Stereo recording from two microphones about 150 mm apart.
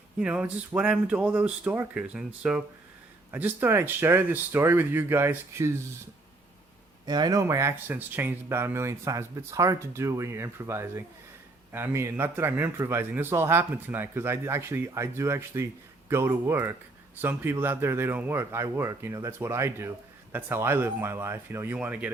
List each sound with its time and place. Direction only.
0.2 s a man's voice: 5° right (ahead or behind)
7.0 s a man's voice: 25° right (ahead or behind); by 22.1 s 10° right (ahead or behind)